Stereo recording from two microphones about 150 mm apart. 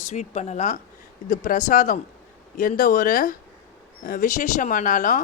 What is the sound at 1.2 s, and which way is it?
A woman's voice, 65° left (ahead or behind).